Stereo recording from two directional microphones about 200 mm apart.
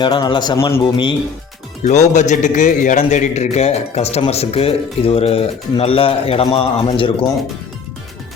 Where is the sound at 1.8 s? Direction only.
35° left (ahead or behind).